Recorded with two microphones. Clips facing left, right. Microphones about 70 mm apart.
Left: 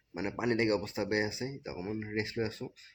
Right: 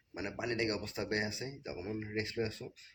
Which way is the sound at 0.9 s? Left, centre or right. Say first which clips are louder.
Left 4 dB; centre.